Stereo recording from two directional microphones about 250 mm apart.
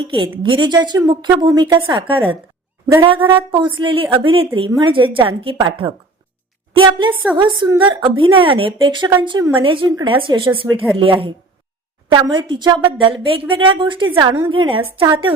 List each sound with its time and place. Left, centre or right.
0.4 s a woman's voice: centre